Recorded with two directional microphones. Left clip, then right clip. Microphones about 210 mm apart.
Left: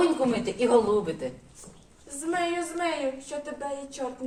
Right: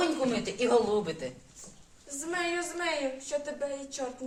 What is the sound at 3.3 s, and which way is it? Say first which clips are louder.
Speech: right 2 dB; 5° left (ahead or behind).